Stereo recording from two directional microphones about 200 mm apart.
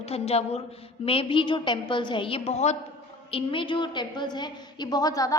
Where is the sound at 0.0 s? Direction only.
30° left (ahead or behind).